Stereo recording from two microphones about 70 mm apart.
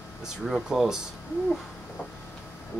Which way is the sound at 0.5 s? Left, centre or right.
Centre.